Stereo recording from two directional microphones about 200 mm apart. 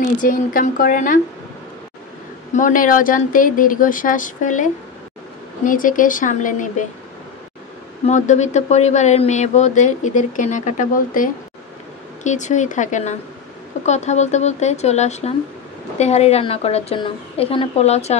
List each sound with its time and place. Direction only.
0.2 s speech: 45° left (ahead or behind)
2.5 s speech: 40° left (ahead or behind)
5.7 s speech: 40° left (ahead or behind)
8.1 s speech: 35° left (ahead or behind)